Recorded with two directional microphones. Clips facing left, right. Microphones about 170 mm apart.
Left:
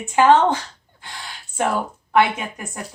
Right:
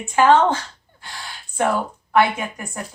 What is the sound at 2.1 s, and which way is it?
Speech, 20° left (ahead or behind).